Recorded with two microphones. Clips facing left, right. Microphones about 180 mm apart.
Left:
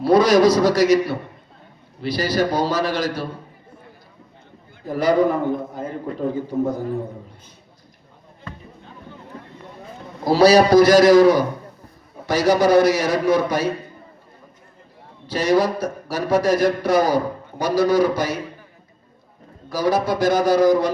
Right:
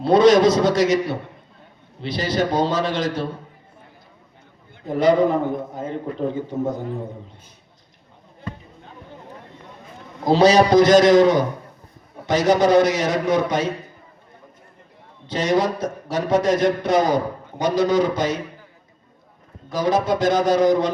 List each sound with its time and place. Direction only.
0.0 s a man's voice: 25° right (ahead or behind)
4.9 s a man's voice: 25° right (ahead or behind)
10.2 s a man's voice: 20° right (ahead or behind)
15.3 s a man's voice: 20° right (ahead or behind)
19.7 s a man's voice: 20° right (ahead or behind)